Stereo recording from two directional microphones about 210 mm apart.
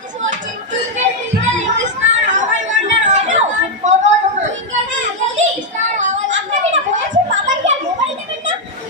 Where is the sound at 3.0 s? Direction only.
35° right (ahead or behind).